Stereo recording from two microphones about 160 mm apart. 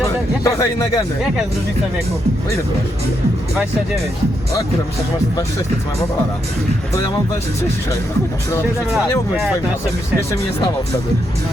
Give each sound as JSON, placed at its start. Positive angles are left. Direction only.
{"t": 0.0, "sound": "speech", "side_deg": 20}